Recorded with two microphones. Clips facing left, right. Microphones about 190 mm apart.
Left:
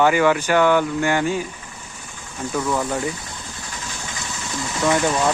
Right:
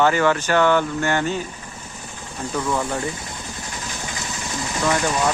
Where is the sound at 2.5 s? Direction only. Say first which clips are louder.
Left 1 dB; 5° left (ahead or behind).